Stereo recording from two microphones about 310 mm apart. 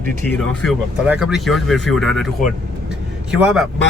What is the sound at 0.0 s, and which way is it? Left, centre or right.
Speech, right.